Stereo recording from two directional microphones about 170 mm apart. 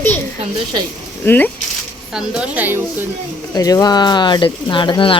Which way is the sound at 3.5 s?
20° left (ahead or behind).